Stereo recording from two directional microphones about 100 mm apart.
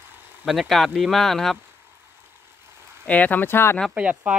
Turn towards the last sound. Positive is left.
turn(degrees=-15)  # may be behind; listen again after turning